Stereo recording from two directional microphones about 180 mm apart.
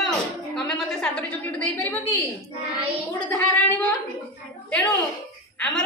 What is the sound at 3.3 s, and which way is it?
Speech, 10° left (ahead or behind).